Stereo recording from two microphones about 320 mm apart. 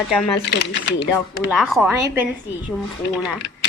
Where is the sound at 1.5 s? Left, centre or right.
Centre.